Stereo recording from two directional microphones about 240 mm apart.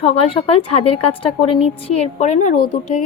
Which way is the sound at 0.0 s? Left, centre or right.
Left.